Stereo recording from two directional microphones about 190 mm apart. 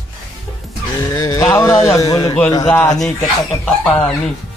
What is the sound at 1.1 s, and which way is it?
Speech, 15° left (ahead or behind).